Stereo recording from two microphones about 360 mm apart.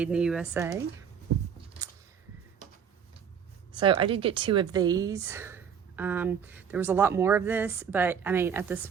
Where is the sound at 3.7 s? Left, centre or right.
Centre.